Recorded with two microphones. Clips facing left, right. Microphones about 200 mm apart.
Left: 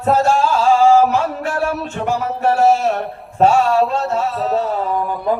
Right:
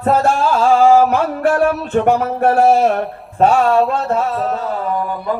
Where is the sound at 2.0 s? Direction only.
55° right (ahead or behind).